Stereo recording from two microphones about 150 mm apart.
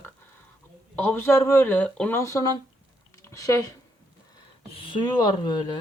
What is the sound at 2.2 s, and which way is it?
Speech, 20° left (ahead or behind).